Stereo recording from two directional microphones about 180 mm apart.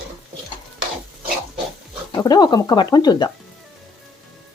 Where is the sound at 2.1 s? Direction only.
20° left (ahead or behind).